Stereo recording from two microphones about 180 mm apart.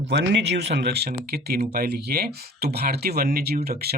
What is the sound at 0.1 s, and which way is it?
Speech, 70° right (ahead or behind).